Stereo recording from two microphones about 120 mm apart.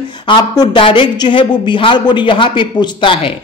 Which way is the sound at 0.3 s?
40° left (ahead or behind).